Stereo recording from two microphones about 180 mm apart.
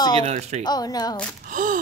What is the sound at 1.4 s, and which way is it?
Speech, 45° right (ahead or behind).